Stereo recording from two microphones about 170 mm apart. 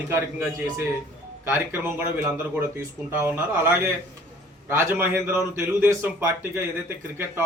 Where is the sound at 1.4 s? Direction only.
10° right (ahead or behind).